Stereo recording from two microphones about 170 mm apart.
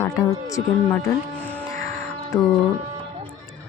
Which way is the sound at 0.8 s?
10° left (ahead or behind).